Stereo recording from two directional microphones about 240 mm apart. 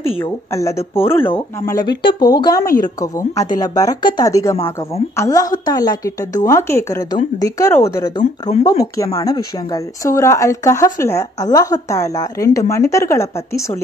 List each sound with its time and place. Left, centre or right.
0.2 s speech: centre